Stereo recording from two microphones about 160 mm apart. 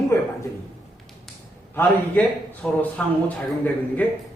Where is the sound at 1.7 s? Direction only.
10° left (ahead or behind).